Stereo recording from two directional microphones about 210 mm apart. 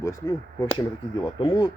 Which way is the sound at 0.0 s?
15° left (ahead or behind).